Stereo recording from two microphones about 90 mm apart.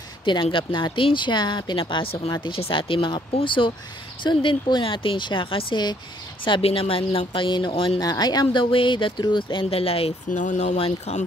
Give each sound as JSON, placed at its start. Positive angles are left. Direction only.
{"t": 0.2, "sound": "speech", "side_deg": 70}
{"t": 6.4, "sound": "speech", "side_deg": 75}
{"t": 8.0, "sound": "speech", "side_deg": 50}